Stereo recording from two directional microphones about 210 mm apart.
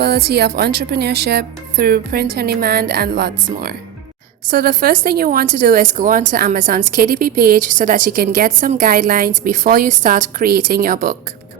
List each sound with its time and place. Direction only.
0.0 s speech: 50° right (ahead or behind)